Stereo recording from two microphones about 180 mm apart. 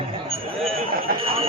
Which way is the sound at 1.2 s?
30° right (ahead or behind).